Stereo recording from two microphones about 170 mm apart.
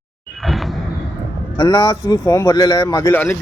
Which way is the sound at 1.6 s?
20° left (ahead or behind).